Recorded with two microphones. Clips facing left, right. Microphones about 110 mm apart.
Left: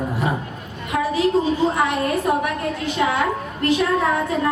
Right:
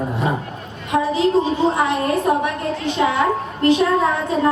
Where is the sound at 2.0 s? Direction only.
30° right (ahead or behind).